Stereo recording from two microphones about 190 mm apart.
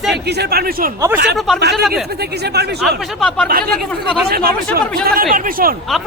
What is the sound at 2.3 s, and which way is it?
Speech, 60° right (ahead or behind).